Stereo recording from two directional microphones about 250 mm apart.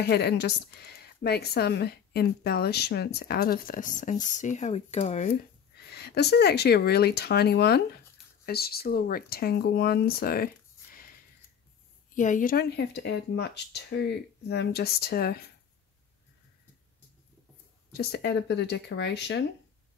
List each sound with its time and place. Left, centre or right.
0.0 s speech: left
12.1 s speech: left
17.9 s speech: left